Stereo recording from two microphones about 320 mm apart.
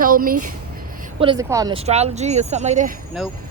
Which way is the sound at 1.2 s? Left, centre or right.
Centre.